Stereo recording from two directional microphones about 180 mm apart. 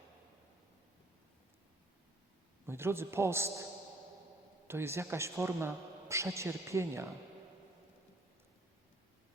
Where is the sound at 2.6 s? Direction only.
15° right (ahead or behind).